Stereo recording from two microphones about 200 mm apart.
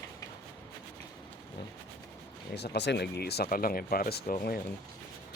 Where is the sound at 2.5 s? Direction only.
55° left (ahead or behind).